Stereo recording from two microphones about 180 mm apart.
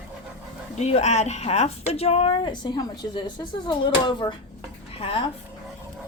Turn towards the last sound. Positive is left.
turn(degrees=30)  # may be behind; listen again after turning